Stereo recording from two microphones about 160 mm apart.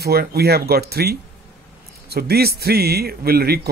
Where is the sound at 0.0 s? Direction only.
75° right (ahead or behind).